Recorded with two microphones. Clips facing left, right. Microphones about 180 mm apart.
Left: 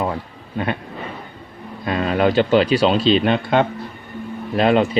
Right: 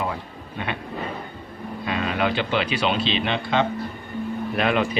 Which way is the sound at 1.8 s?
45° left (ahead or behind).